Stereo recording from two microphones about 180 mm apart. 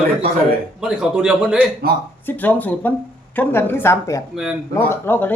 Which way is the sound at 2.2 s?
10° left (ahead or behind).